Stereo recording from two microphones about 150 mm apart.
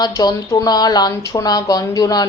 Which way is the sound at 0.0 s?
25° left (ahead or behind).